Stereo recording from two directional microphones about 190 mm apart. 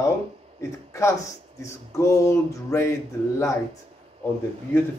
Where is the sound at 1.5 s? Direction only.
15° left (ahead or behind).